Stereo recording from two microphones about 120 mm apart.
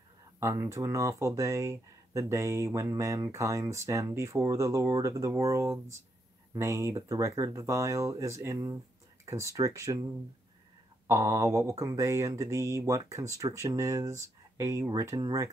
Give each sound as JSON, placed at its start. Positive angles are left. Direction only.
{"t": 0.4, "sound": "speech", "side_deg": -25}
{"t": 11.1, "sound": "speech", "side_deg": -25}